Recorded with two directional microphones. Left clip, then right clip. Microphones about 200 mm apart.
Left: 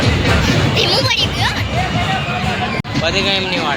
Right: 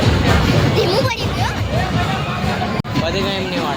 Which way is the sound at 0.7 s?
45° right (ahead or behind).